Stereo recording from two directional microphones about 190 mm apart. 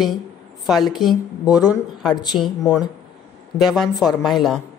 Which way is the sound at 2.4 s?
Centre (ahead or behind).